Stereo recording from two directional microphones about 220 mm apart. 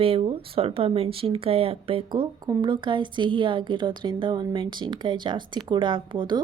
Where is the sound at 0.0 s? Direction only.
25° right (ahead or behind).